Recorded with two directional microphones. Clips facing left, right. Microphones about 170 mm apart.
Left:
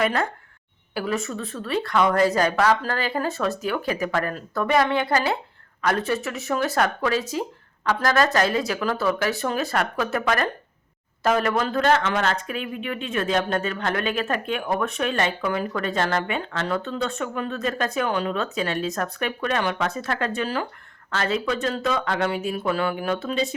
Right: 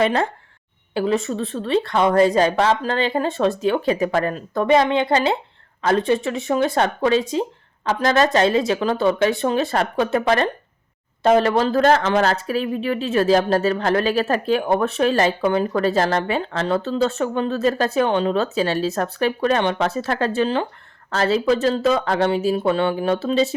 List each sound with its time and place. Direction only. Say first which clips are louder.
0.0 s a woman's voice: right 4 dB; 30° right (ahead or behind)